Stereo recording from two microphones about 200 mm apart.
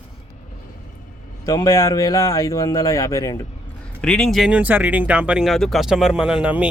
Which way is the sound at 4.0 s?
5° left (ahead or behind).